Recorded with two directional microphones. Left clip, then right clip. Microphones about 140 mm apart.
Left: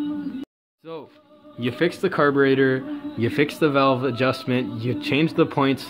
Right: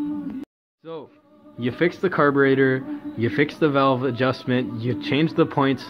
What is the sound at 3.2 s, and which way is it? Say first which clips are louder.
Speech: even; 15° left (ahead or behind).